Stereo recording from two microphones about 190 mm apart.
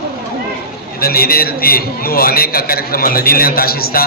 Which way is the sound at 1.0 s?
50° left (ahead or behind).